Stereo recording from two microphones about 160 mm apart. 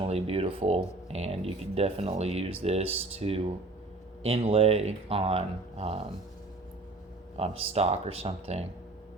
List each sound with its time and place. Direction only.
0.1 s speech: 40° right (ahead or behind)
7.3 s speech: 35° right (ahead or behind)